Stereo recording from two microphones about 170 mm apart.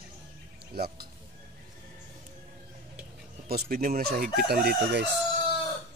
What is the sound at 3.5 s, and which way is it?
Speech, 65° right (ahead or behind).